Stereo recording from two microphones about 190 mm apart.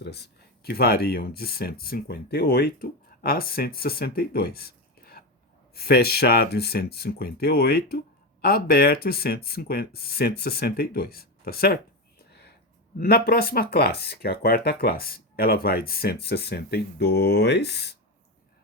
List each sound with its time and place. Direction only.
0.0 s speech: 60° left (ahead or behind)
12.3 s a sound: 60° left (ahead or behind)
13.0 s speech: 55° left (ahead or behind)